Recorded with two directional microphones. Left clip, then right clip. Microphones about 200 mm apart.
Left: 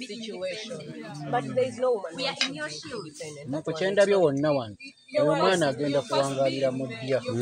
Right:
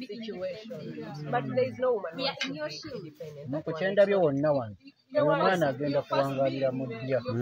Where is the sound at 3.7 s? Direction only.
45° left (ahead or behind).